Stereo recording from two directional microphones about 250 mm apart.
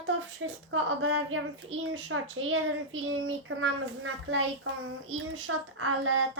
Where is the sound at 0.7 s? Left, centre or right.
Right.